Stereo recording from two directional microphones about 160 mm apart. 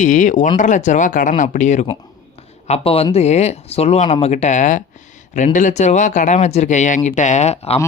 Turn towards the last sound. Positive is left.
turn(degrees=40)  # may be behind; listen again after turning